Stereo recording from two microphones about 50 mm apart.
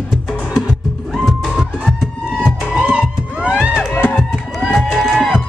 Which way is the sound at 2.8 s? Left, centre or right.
Centre.